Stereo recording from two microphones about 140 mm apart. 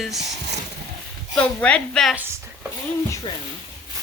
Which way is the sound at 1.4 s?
10° left (ahead or behind).